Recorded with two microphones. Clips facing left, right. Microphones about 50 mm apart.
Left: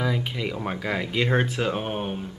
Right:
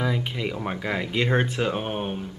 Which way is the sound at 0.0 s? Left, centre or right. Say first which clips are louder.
Even; centre.